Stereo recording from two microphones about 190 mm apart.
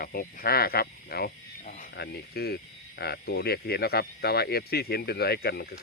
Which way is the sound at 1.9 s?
55° left (ahead or behind).